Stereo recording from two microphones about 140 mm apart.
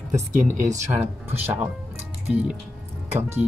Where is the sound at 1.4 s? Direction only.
10° right (ahead or behind).